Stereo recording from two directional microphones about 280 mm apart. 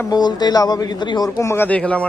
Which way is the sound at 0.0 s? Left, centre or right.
Centre.